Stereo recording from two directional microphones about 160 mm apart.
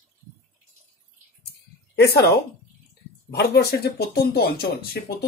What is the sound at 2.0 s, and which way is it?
Speech, 90° left.